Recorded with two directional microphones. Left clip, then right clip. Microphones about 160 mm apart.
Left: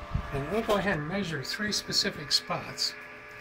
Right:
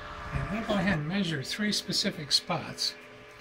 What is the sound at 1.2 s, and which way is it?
Speech, 15° right (ahead or behind).